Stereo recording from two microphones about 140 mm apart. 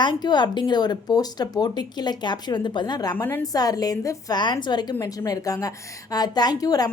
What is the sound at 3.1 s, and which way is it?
Speech, 15° left (ahead or behind).